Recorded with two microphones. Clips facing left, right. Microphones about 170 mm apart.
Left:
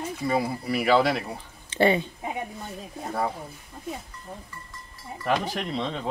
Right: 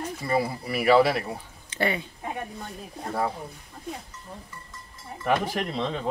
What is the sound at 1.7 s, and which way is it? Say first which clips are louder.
Speech: left 6 dB; 30° left (ahead or behind).